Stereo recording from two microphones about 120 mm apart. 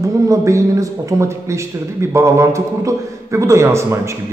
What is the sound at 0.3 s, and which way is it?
Speech, 25° right (ahead or behind).